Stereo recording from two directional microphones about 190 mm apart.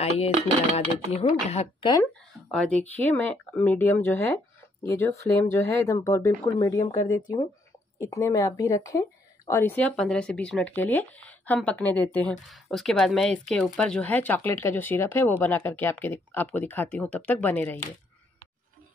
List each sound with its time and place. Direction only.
0.7 s speech: 30° left (ahead or behind)
2.5 s speech: 10° left (ahead or behind)